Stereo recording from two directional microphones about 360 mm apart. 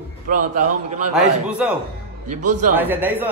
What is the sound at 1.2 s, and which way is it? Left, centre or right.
Speech, centre.